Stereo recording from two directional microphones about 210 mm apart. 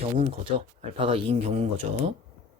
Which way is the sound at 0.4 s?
25° right (ahead or behind).